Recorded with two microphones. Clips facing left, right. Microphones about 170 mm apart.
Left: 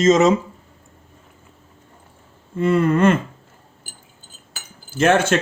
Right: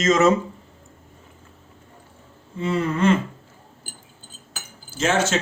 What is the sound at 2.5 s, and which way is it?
Speech, 55° left (ahead or behind).